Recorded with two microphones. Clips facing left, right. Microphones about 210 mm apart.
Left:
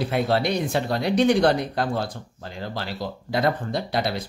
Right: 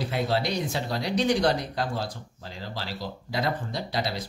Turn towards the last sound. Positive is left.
turn(degrees=55)  # may be behind; listen again after turning